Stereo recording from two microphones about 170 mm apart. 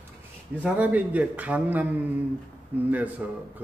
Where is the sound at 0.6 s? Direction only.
10° right (ahead or behind).